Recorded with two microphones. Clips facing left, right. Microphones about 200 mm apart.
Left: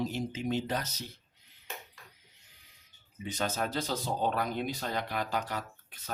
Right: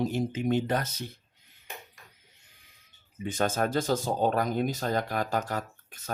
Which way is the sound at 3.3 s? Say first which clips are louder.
Right 6 dB; 50° right (ahead or behind).